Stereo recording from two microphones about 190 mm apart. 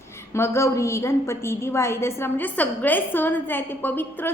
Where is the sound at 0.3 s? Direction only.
15° left (ahead or behind).